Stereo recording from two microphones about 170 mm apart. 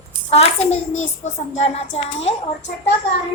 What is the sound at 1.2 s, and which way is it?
A child's voice, 40° left (ahead or behind).